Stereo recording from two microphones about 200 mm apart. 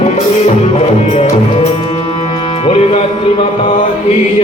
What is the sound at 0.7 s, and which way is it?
Music, 30° left (ahead or behind).